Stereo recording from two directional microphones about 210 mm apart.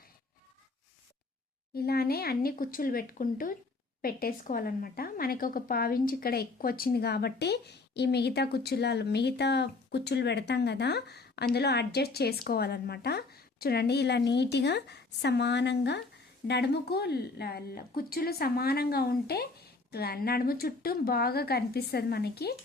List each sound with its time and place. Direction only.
1.7 s a woman's voice: 45° left (ahead or behind)